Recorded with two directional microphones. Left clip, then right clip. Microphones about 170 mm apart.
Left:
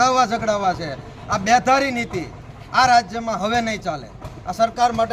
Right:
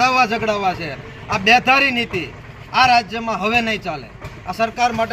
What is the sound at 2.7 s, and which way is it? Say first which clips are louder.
Speech: right 2 dB; 10° left (ahead or behind).